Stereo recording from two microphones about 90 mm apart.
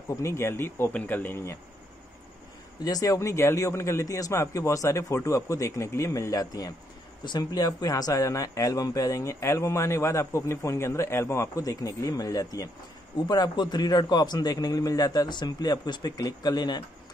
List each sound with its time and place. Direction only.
0.1 s speech: 30° left (ahead or behind)
2.8 s speech: 40° left (ahead or behind)
13.3 s a man's voice: 50° left (ahead or behind)